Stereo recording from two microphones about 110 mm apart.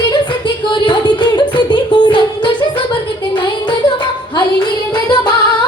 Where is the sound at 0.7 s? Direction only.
45° left (ahead or behind).